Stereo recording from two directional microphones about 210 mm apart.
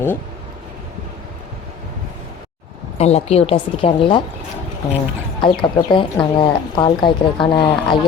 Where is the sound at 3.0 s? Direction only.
30° left (ahead or behind).